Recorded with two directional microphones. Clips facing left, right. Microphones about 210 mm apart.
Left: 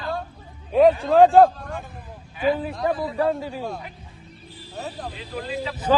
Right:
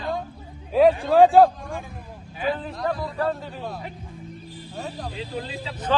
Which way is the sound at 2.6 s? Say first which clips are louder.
Left 3 dB; 10° left (ahead or behind).